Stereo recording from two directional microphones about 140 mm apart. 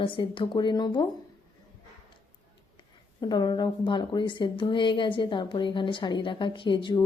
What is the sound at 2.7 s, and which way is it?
A woman's voice, 30° left (ahead or behind).